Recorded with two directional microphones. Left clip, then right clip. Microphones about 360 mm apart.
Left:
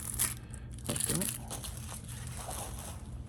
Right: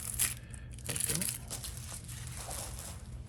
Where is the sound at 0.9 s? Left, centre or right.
Centre.